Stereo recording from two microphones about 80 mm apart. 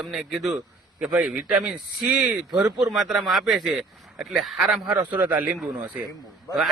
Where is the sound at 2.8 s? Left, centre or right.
Centre.